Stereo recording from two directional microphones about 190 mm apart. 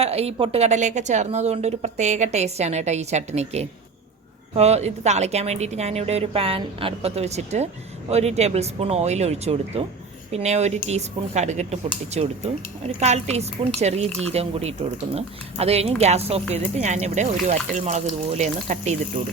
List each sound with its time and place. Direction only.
0.0 s a woman's voice: 30° right (ahead or behind)